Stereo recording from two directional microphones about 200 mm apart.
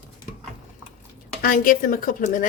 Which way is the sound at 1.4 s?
45° left (ahead or behind).